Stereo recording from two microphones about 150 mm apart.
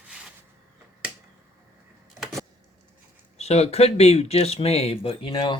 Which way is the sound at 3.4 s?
45° left (ahead or behind).